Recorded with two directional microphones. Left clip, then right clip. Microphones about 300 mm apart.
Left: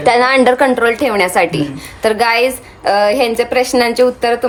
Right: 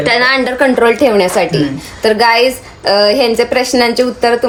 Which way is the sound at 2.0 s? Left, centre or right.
Centre.